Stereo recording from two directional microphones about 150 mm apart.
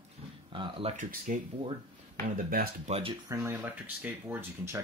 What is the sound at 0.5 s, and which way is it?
Speech, 35° right (ahead or behind).